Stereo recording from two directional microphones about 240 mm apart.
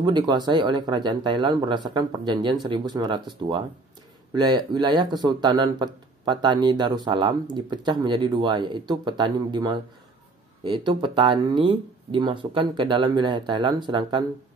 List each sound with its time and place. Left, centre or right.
0.0 s speech: centre